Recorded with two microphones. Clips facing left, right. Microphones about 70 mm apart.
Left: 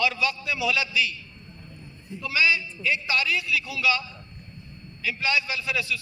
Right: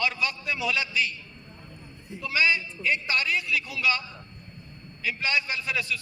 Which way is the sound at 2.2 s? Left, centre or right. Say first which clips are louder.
Left 1 dB; right.